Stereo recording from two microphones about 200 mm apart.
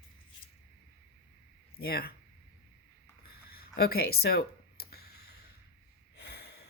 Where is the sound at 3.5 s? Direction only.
50° left (ahead or behind).